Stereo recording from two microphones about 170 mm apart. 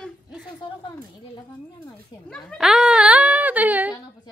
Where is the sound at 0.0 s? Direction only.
5° right (ahead or behind).